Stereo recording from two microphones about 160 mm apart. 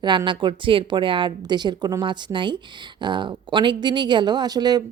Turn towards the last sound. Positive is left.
turn(degrees=-25)  # may be behind; listen again after turning